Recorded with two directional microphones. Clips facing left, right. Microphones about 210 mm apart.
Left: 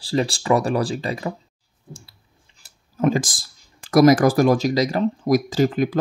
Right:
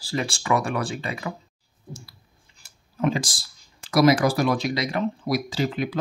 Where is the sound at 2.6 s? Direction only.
45° left (ahead or behind).